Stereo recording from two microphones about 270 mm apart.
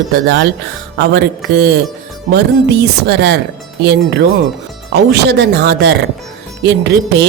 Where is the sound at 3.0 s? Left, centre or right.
Right.